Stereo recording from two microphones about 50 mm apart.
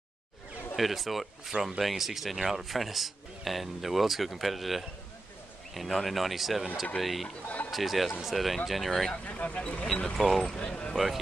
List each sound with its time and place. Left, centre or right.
0.7 s speech: centre
7.4 s speech: left
7.7 s speech: centre
9.1 s speech: left
10.0 s speech: centre